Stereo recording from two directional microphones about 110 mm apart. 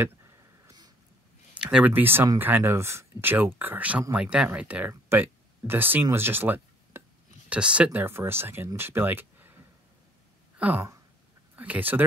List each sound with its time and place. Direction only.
0.7 s a sound: 35° right (ahead or behind)
1.5 s speech: 10° right (ahead or behind)
10.6 s speech: 15° right (ahead or behind)